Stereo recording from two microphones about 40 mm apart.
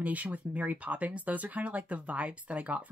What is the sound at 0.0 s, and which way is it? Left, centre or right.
Speech, right.